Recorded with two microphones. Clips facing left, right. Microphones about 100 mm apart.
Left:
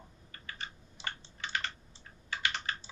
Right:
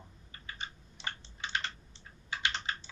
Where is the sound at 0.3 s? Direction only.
20° right (ahead or behind).